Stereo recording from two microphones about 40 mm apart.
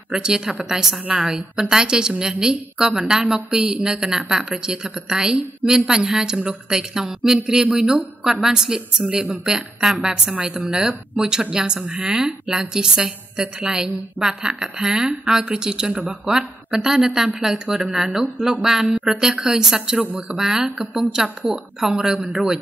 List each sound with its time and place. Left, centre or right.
0.1 s a woman's voice: centre